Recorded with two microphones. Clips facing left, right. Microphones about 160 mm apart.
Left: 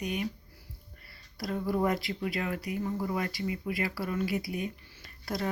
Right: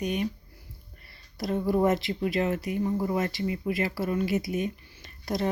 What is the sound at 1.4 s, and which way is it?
Speech, 20° right (ahead or behind).